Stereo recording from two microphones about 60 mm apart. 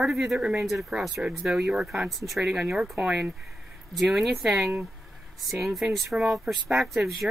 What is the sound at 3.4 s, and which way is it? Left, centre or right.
Speech, centre.